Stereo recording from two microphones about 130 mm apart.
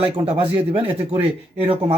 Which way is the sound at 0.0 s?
45° right (ahead or behind).